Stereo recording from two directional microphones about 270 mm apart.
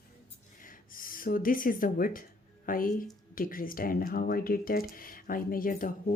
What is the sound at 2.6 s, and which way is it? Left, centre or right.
Speech, left.